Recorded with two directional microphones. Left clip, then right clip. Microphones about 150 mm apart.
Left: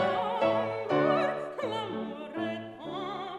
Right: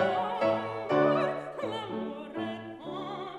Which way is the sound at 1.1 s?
25° left (ahead or behind).